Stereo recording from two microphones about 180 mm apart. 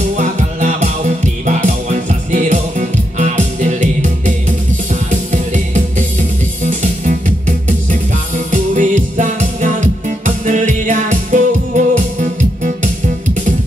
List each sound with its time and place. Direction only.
0.2 s music: 45° right (ahead or behind)